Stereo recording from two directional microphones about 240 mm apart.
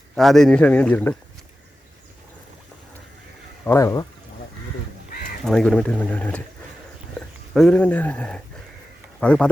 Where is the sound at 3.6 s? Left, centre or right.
Centre.